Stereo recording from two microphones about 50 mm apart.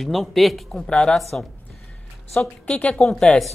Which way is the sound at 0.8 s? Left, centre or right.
Centre.